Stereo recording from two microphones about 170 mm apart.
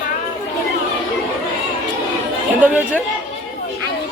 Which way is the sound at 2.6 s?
10° right (ahead or behind).